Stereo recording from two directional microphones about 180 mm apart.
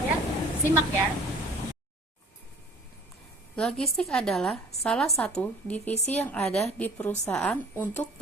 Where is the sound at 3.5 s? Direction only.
5° left (ahead or behind).